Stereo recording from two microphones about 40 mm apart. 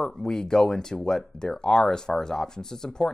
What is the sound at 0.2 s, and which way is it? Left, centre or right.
Speech, centre.